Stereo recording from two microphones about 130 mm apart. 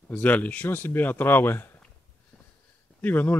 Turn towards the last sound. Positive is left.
turn(degrees=15)  # may be behind; listen again after turning